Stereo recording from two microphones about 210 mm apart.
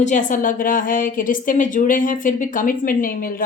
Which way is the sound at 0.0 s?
35° left (ahead or behind).